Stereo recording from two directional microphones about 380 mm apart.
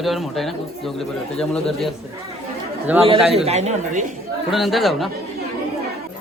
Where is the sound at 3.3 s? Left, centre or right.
Centre.